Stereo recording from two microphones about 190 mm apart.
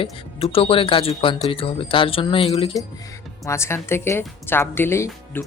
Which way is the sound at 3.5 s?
15° left (ahead or behind).